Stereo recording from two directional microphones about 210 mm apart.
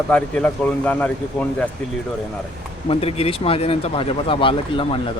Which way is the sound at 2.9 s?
30° left (ahead or behind).